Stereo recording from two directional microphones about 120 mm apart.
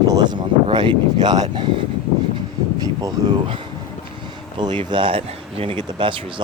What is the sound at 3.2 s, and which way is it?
Speech, 30° right (ahead or behind).